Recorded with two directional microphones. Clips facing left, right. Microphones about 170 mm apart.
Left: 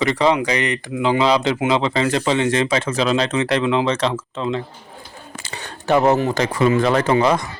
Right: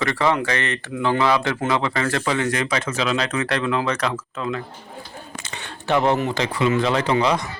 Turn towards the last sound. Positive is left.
turn(degrees=50)  # may be behind; listen again after turning